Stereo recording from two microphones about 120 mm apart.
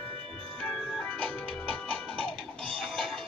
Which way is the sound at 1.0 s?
15° left (ahead or behind).